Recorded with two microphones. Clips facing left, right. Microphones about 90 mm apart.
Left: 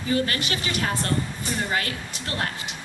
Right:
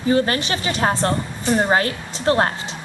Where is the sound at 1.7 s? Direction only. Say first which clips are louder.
Right 8 dB; 30° right (ahead or behind).